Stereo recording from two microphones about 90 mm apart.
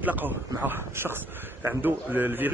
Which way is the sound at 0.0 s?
20° right (ahead or behind).